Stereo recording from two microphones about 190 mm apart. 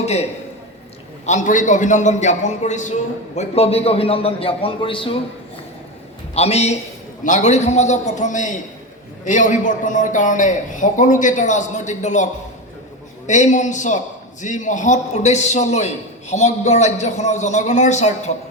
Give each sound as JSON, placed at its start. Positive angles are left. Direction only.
{"t": 0.0, "sound": "a man's voice", "side_deg": 35}
{"t": 6.3, "sound": "a man's voice", "side_deg": 35}